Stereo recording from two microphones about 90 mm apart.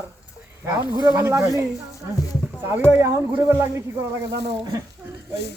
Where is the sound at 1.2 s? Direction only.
30° right (ahead or behind).